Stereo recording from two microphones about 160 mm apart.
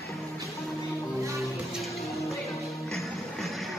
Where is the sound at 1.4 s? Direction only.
Centre (ahead or behind).